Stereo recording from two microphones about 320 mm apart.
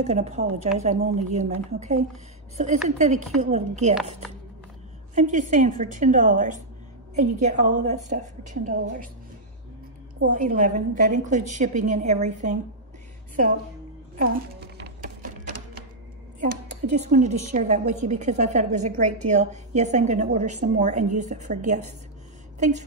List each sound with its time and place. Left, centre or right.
0.0 s a woman's voice: centre
5.1 s a woman's voice: right
10.3 s a woman's voice: right
14.1 s music: right
16.3 s a woman's voice: right